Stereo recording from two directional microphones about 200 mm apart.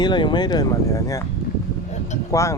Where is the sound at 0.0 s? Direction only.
25° left (ahead or behind).